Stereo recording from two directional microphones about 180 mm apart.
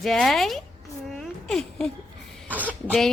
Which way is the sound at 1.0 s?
Centre (ahead or behind).